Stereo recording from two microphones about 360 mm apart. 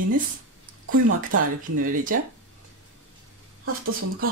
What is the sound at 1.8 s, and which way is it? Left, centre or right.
Speech, right.